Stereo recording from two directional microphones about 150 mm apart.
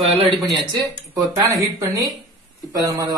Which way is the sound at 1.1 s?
20° right (ahead or behind).